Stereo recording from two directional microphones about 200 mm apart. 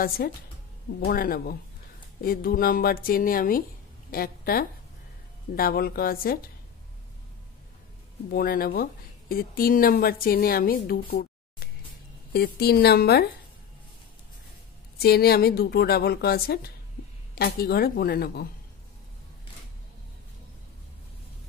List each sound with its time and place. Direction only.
0.2 s a woman's voice: 50° left (ahead or behind)
8.3 s a woman's voice: 50° left (ahead or behind)
15.0 s a woman's voice: 50° left (ahead or behind)